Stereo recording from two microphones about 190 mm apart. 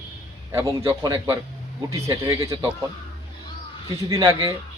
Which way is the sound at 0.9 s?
15° right (ahead or behind).